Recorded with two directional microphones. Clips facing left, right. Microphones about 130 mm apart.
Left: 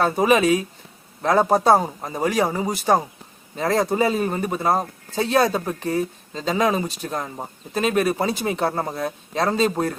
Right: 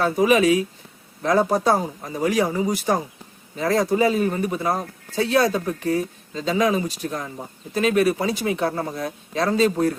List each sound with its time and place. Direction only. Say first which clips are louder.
0.0 s speech: even; 35° left (ahead or behind)